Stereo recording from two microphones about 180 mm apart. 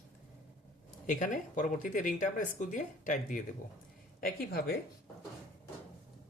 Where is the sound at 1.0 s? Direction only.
45° left (ahead or behind).